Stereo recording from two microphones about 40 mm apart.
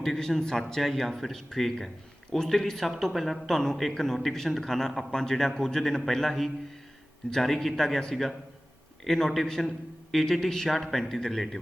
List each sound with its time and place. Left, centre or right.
0.0 s a man's voice: centre
0.6 s a man's voice: centre